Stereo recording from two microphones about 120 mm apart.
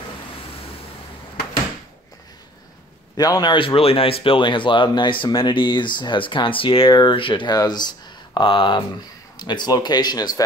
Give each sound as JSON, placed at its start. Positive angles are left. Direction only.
{"t": 3.2, "sound": "speech", "side_deg": 35}
{"t": 6.9, "sound": "speech", "side_deg": 35}